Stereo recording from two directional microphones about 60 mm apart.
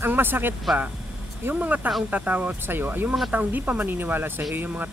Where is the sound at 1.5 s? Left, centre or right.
Right.